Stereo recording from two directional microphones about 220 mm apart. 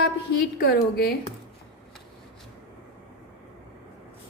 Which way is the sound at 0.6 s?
45° left (ahead or behind).